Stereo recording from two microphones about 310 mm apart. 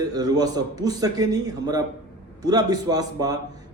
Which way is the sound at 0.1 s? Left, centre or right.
Centre.